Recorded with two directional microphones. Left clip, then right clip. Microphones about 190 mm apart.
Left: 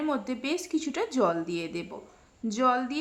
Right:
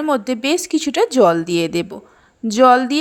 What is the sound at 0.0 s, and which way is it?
A woman's voice, 40° right (ahead or behind).